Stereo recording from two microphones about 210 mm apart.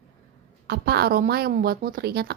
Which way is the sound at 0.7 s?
50° right (ahead or behind).